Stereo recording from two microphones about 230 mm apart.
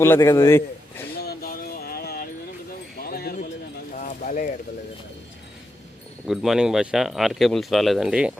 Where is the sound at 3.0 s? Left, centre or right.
Left.